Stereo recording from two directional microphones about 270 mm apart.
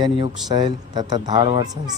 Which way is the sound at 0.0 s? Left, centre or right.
Centre.